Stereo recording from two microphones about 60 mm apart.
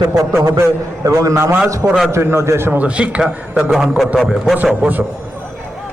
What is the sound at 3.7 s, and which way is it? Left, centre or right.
Speech, centre.